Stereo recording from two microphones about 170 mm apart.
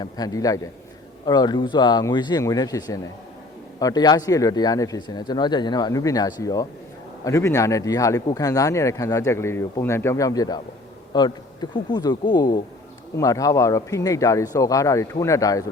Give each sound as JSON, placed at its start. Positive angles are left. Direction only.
{"t": 0.0, "sound": "speech", "side_deg": 20}